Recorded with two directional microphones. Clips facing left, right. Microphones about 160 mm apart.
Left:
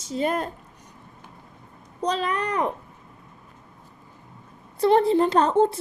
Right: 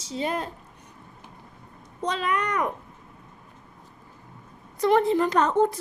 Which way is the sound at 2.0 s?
35° left (ahead or behind).